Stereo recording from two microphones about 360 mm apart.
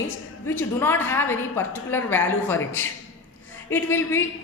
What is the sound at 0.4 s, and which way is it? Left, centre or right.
A woman's voice, centre.